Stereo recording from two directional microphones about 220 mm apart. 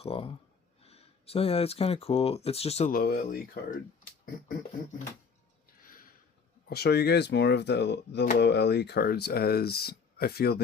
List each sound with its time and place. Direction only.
0.0 s speech: 25° left (ahead or behind)
2.9 s speech: 40° left (ahead or behind)
5.8 s a sound: 40° left (ahead or behind)
6.7 s speech: 45° left (ahead or behind)